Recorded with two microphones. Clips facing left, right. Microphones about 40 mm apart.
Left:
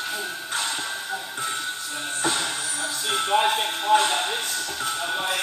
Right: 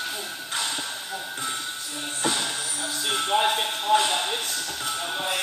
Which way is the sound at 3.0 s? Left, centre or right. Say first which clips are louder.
Left 1 dB; left.